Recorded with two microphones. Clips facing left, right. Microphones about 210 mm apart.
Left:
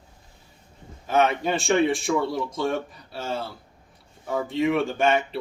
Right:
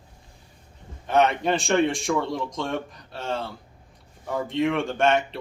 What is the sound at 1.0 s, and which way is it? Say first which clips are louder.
Speech: right 1 dB; centre (ahead or behind).